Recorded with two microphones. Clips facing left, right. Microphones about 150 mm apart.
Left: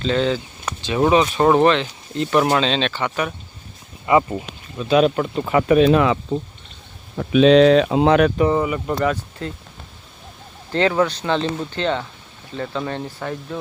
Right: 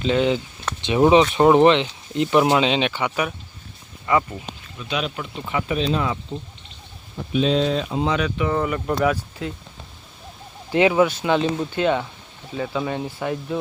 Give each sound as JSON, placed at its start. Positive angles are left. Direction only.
{"t": 0.0, "sound": "speech", "side_deg": -15}
{"t": 4.0, "sound": "speech", "side_deg": 20}
{"t": 4.8, "sound": "speech", "side_deg": 40}
{"t": 7.2, "sound": "speech", "side_deg": 80}
{"t": 8.5, "sound": "speech", "side_deg": 5}
{"t": 10.7, "sound": "speech", "side_deg": -15}